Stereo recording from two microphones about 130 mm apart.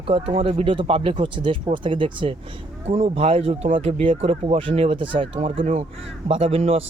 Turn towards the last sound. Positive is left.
turn(degrees=-50)  # may be behind; listen again after turning